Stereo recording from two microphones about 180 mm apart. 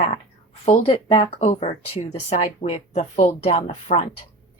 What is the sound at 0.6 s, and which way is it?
A woman's voice, 35° left (ahead or behind).